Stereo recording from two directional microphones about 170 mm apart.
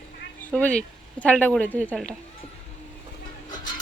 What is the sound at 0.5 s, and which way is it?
Speech, 5° left (ahead or behind).